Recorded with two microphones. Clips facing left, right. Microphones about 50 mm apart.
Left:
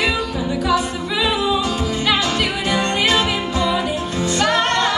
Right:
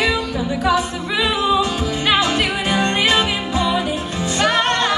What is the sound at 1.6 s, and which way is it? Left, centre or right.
Music, right.